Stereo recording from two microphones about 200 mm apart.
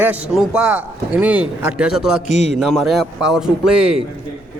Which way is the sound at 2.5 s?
Centre (ahead or behind).